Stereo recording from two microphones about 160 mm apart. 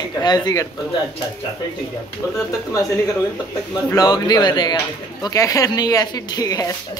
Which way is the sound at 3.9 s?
25° left (ahead or behind).